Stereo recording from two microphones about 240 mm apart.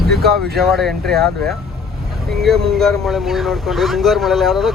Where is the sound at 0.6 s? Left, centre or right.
Centre.